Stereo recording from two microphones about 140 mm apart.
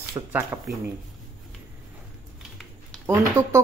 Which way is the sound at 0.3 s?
15° right (ahead or behind).